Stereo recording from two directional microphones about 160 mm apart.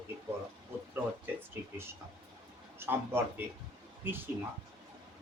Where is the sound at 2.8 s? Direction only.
15° right (ahead or behind).